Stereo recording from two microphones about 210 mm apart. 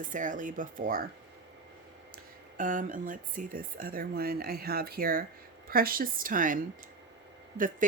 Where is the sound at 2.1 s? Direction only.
40° right (ahead or behind).